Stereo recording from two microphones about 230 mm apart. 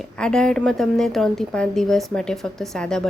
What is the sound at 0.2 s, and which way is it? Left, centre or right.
A woman's voice, centre.